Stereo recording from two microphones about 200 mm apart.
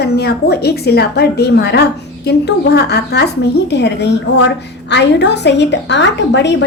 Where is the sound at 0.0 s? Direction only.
55° left (ahead or behind).